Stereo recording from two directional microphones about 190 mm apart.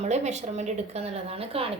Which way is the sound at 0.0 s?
35° right (ahead or behind).